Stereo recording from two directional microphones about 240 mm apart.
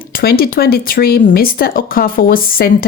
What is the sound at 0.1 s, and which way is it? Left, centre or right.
Speech, left.